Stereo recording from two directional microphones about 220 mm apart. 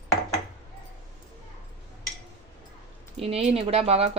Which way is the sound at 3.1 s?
25° right (ahead or behind).